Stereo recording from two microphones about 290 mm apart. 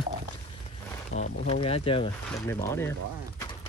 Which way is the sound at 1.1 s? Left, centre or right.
Left.